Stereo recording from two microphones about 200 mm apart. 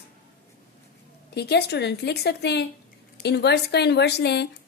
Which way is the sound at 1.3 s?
55° left (ahead or behind).